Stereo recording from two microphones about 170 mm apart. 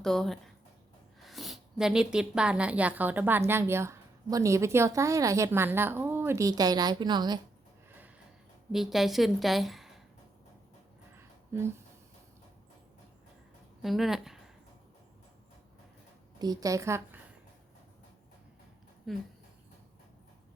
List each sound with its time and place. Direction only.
0.0 s a woman's voice: 5° left (ahead or behind); by 7.3 s 25° right (ahead or behind)
7.9 s a sound: 10° right (ahead or behind)
8.7 s a woman's voice: centre (ahead or behind)
13.8 s speech: centre (ahead or behind)
16.4 s a woman's voice: 20° right (ahead or behind)
19.1 s a woman's voice: centre (ahead or behind)